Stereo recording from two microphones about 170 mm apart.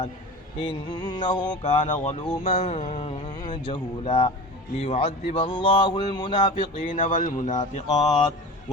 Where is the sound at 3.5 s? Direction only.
25° left (ahead or behind).